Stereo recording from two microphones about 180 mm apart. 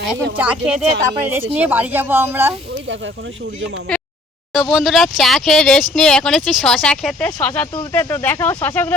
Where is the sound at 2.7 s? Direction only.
90° right.